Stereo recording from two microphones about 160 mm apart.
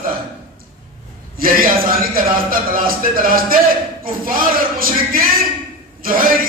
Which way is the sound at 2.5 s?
65° right (ahead or behind).